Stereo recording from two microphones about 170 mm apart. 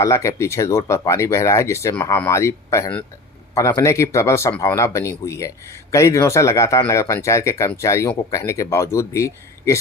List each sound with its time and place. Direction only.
0.0 s speech: 20° left (ahead or behind)